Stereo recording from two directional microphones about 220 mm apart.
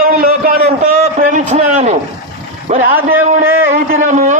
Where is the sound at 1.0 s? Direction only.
35° right (ahead or behind).